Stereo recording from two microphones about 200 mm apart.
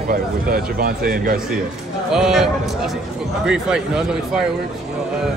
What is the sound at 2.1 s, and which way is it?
Speech, centre (ahead or behind).